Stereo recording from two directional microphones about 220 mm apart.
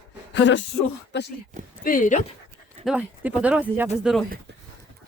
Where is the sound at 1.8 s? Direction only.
40° left (ahead or behind).